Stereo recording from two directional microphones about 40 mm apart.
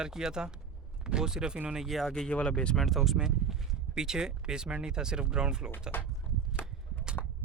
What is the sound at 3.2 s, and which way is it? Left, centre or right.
Speech, centre.